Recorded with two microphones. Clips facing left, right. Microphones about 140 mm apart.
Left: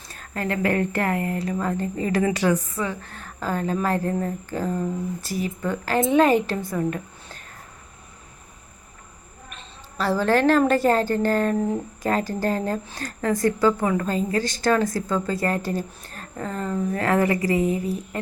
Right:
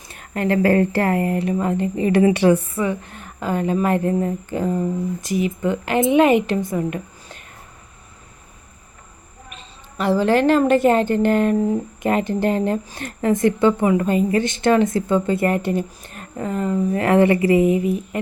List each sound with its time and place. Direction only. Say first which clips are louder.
0.1 s a woman's voice: right 7 dB; 25° right (ahead or behind)
10.0 s a woman's voice: right 3 dB; 15° right (ahead or behind)
16.9 s a woman's voice: right 6 dB; 25° right (ahead or behind)